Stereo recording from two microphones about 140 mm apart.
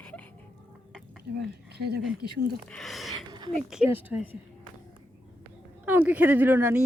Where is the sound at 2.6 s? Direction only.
Centre (ahead or behind).